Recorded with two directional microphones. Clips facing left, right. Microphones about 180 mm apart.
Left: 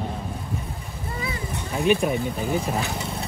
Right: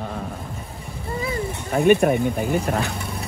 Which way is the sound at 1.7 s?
60° right (ahead or behind).